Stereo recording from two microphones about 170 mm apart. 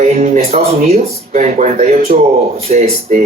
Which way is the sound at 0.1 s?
40° right (ahead or behind).